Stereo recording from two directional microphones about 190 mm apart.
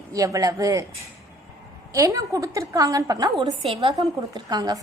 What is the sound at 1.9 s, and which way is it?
A woman's voice, 15° right (ahead or behind).